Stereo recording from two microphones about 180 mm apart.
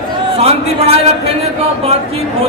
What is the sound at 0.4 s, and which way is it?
Speech, 35° right (ahead or behind).